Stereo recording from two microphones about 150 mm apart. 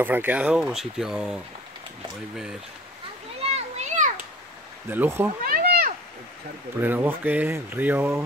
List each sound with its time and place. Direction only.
0.0 s speech: 15° right (ahead or behind)
3.4 s children playing: 45° right (ahead or behind)
4.8 s speech: 15° right (ahead or behind)
5.4 s a sound: 80° right
6.8 s speech: 15° right (ahead or behind)